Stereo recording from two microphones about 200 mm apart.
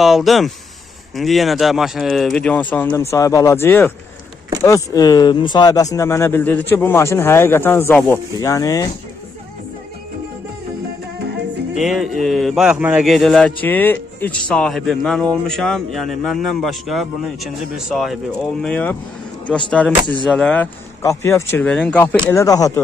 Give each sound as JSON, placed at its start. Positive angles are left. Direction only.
{"t": 0.0, "sound": "speech", "side_deg": 0}
{"t": 11.7, "sound": "speech", "side_deg": 0}
{"t": 21.0, "sound": "speech", "side_deg": 15}
{"t": 22.2, "sound": "speech", "side_deg": 15}